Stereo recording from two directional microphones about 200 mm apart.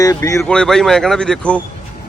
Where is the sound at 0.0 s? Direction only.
15° left (ahead or behind).